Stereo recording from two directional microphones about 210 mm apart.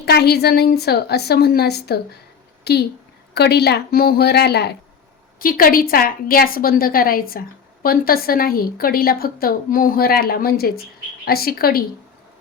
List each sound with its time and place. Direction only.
0.0 s a woman's voice: 50° left (ahead or behind)